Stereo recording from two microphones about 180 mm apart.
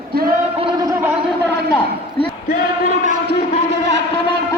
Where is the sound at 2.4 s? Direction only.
50° left (ahead or behind).